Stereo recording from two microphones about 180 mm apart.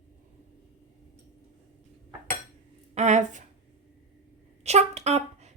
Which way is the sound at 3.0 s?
40° right (ahead or behind).